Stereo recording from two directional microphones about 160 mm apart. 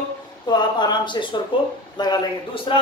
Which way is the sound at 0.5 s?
25° left (ahead or behind).